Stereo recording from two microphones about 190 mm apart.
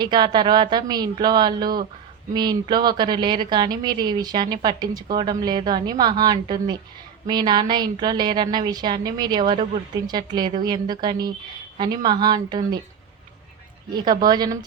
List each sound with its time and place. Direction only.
0.0 s a woman's voice: 25° right (ahead or behind)
13.9 s a woman's voice: 20° right (ahead or behind)